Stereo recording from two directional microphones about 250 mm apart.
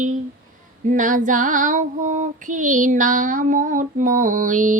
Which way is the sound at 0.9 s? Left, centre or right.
Right.